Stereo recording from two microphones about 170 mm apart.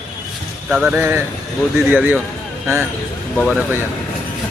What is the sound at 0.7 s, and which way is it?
Speech, 5° right (ahead or behind).